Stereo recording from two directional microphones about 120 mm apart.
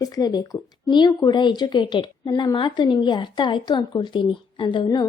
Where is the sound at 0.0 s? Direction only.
35° left (ahead or behind).